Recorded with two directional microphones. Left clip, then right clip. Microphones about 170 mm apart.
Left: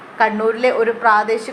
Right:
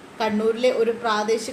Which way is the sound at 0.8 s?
5° right (ahead or behind).